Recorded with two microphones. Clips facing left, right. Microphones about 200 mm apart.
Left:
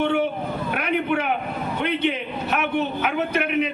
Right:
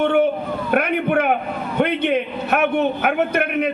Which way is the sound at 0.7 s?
55° right (ahead or behind).